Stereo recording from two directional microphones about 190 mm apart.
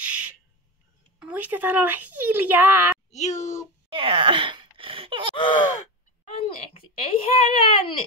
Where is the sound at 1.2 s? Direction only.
10° right (ahead or behind).